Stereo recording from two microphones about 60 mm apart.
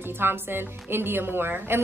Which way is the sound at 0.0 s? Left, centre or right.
Right.